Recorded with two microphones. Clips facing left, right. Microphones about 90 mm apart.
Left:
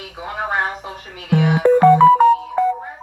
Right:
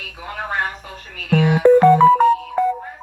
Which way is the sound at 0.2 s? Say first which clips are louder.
Left 2 dB; 20° left (ahead or behind).